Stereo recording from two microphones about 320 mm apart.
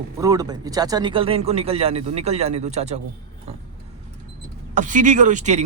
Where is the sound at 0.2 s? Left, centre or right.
Centre.